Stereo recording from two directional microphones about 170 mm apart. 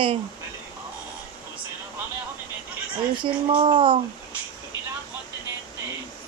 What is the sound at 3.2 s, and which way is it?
Speech, 30° right (ahead or behind).